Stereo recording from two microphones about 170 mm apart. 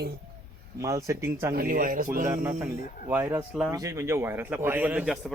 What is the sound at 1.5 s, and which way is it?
Speech, 60° right (ahead or behind).